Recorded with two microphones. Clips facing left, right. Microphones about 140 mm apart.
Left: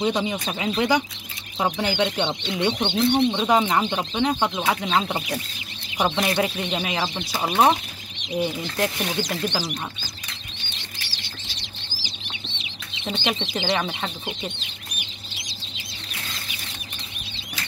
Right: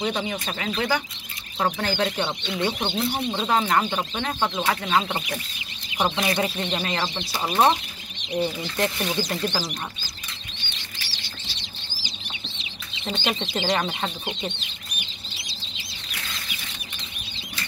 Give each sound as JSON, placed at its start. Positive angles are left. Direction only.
{"t": 0.0, "sound": "speech", "side_deg": 15}
{"t": 2.4, "sound": "speech", "side_deg": 25}
{"t": 2.8, "sound": "speech", "side_deg": -5}
{"t": 3.4, "sound": "speech", "side_deg": 15}
{"t": 13.0, "sound": "speech", "side_deg": 5}